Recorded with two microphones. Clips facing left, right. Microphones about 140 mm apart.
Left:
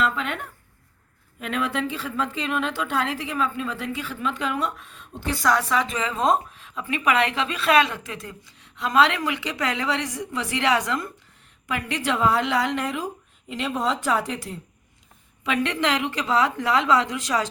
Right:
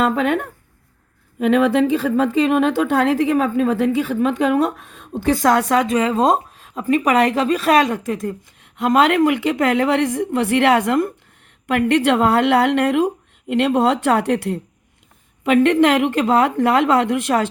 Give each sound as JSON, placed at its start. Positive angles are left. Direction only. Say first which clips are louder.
{"t": 0.0, "sound": "a woman's voice", "louder": "right 8 dB", "side_deg": -50}
{"t": 1.4, "sound": "a woman's voice", "louder": "right 12 dB", "side_deg": -65}
{"t": 15.4, "sound": "a woman's voice", "louder": "right 10 dB", "side_deg": -50}